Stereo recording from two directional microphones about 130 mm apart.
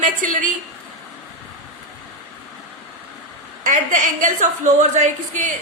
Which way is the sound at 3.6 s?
90° right.